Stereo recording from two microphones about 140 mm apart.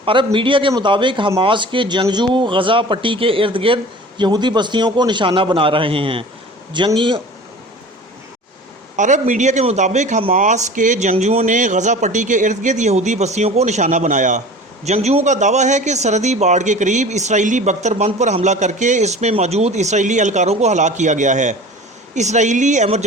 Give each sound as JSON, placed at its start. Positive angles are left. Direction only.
{"t": 0.0, "sound": "a man's voice", "side_deg": -40}
{"t": 9.0, "sound": "a man's voice", "side_deg": -60}
{"t": 11.1, "sound": "a man's voice", "side_deg": -50}
{"t": 14.8, "sound": "a man's voice", "side_deg": -50}